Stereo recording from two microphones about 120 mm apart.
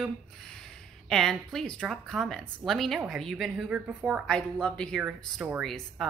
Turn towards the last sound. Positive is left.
turn(degrees=0)  # may be behind; listen again after turning